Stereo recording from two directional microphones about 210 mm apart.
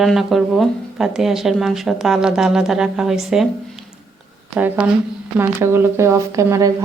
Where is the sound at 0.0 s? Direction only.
Centre (ahead or behind).